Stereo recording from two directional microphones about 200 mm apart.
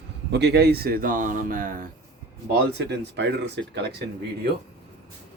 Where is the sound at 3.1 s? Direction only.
55° right (ahead or behind).